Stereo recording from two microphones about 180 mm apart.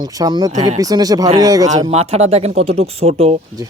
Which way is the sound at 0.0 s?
25° right (ahead or behind).